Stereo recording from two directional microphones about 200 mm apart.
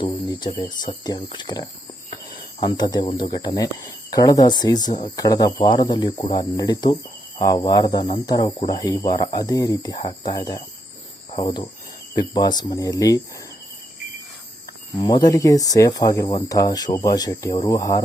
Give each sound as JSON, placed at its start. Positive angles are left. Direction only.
{"t": 0.0, "sound": "speech", "side_deg": 25}
{"t": 0.9, "sound": "cricket", "side_deg": 20}
{"t": 14.9, "sound": "speech", "side_deg": 20}